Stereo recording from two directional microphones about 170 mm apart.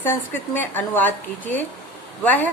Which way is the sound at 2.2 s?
10° left (ahead or behind).